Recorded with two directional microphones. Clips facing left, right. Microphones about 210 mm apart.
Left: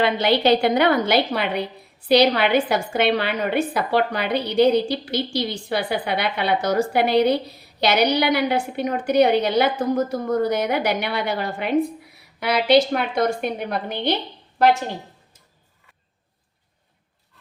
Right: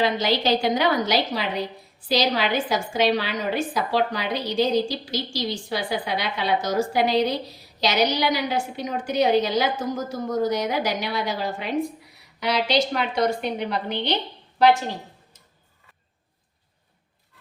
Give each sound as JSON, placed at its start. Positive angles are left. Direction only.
{"t": 0.0, "sound": "a woman's voice", "side_deg": 60}